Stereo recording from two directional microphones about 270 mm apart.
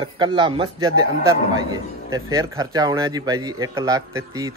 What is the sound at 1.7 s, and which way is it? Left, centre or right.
A man's voice, centre.